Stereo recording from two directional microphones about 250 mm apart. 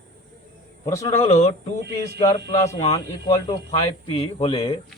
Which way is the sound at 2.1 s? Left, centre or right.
Centre.